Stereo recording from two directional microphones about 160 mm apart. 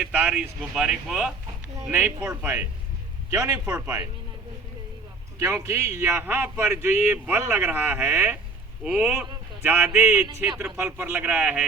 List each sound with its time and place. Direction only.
0.0 s a man's voice: 10° right (ahead or behind)
1.8 s a man's voice: 15° right (ahead or behind)
3.7 s a man's voice: 10° right (ahead or behind)
5.4 s a man's voice: 20° right (ahead or behind)